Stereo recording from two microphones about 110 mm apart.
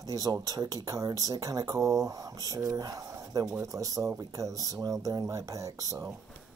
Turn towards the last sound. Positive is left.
turn(degrees=-30)  # may be behind; listen again after turning